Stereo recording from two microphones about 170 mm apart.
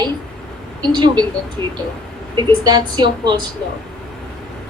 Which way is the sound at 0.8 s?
25° right (ahead or behind).